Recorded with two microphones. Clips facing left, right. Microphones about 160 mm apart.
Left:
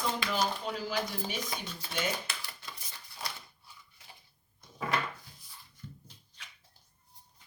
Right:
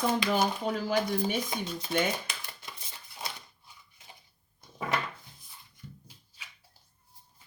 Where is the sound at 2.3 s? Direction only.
20° right (ahead or behind).